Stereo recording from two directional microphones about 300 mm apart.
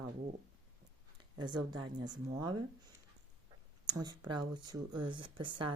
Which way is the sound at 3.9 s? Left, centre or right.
Centre.